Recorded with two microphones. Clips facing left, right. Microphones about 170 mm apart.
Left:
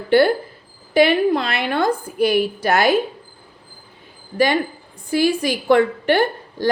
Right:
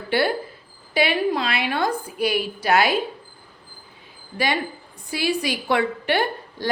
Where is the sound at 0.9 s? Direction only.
50° left (ahead or behind).